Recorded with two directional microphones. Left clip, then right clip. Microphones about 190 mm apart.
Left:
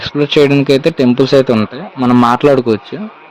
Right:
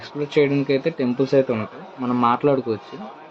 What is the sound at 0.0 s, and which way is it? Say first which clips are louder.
Speech: left 9 dB; 50° left (ahead or behind).